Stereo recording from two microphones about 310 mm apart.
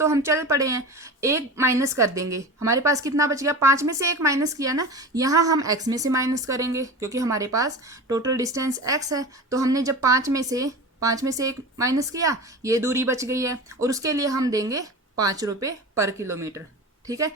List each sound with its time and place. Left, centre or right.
0.0 s speech: centre